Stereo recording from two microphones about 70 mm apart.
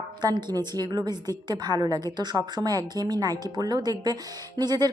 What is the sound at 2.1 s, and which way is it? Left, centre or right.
Speech, right.